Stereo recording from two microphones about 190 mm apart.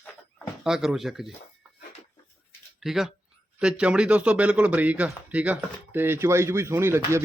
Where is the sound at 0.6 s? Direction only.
5° right (ahead or behind).